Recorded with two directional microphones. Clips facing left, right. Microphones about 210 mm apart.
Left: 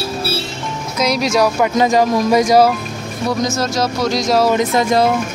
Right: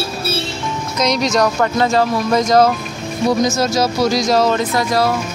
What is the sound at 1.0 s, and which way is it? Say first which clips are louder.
Speech: left 1 dB; 5° left (ahead or behind).